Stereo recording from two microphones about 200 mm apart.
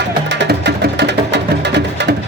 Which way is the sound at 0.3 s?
60° right (ahead or behind).